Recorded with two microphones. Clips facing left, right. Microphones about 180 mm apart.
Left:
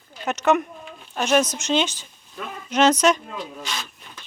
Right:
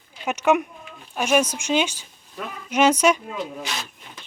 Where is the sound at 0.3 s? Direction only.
10° right (ahead or behind).